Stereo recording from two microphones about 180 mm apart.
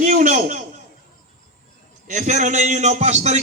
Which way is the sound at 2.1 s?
40° right (ahead or behind).